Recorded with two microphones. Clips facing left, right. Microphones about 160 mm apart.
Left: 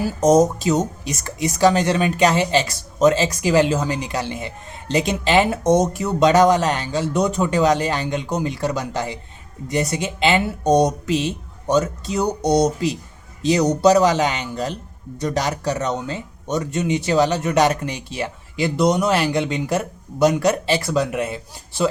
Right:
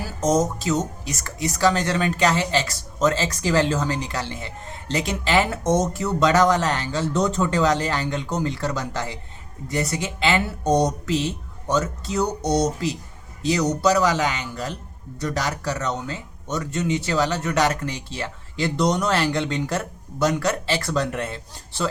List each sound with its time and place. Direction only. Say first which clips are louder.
0.0 s speech: left 6 dB; 15° left (ahead or behind)